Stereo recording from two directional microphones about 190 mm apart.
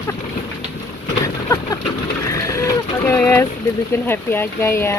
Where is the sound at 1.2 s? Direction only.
15° left (ahead or behind).